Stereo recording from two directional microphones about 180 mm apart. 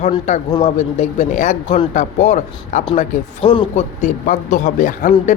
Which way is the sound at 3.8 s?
40° left (ahead or behind).